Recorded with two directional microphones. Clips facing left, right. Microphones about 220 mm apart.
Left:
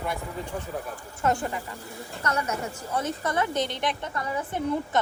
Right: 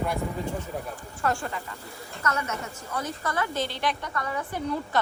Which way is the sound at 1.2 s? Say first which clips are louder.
Left 3 dB; 20° left (ahead or behind).